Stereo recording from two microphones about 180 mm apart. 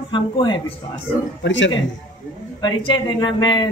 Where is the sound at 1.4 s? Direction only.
90° left.